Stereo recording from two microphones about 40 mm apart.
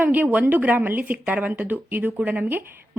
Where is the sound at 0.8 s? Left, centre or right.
Right.